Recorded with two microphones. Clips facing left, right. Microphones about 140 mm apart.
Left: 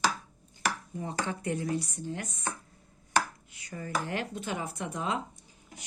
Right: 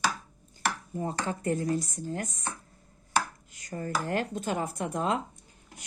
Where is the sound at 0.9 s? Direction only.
40° right (ahead or behind).